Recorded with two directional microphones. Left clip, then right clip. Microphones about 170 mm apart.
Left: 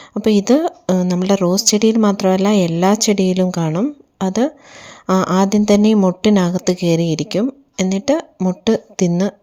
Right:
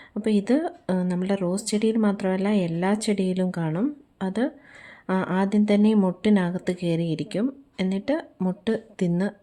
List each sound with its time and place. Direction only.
0.1 s speech: 35° left (ahead or behind)